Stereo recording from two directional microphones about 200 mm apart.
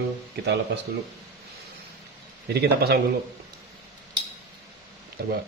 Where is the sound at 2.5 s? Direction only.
55° right (ahead or behind).